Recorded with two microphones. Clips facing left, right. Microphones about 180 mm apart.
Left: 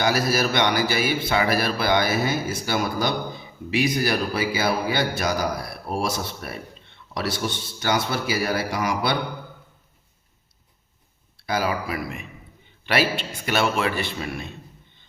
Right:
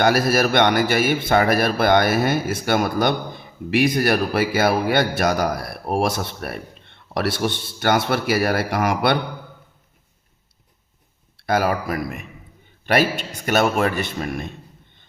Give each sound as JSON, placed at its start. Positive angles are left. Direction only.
{"t": 0.0, "sound": "a man's voice", "side_deg": -55}
{"t": 11.4, "sound": "a man's voice", "side_deg": -55}